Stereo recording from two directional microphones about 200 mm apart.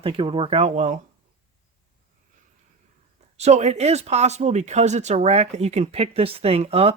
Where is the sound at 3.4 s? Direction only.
35° right (ahead or behind).